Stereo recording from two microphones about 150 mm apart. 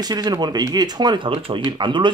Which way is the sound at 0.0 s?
25° right (ahead or behind).